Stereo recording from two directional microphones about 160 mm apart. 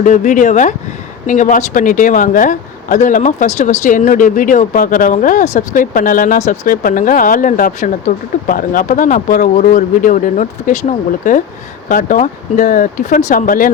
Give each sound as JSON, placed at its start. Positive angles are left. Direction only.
{"t": 0.0, "sound": "speech", "side_deg": 50}